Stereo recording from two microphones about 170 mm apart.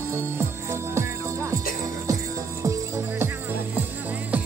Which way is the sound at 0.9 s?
15° right (ahead or behind).